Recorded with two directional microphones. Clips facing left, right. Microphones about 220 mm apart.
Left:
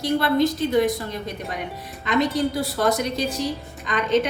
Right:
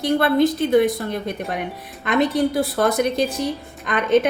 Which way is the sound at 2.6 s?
55° right (ahead or behind).